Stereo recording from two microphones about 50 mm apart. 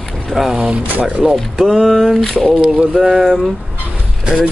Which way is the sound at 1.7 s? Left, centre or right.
Centre.